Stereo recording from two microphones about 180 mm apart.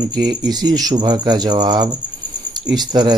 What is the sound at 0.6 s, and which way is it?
Speech, 20° right (ahead or behind).